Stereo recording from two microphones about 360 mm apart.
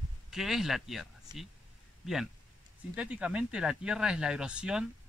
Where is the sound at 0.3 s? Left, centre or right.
Centre.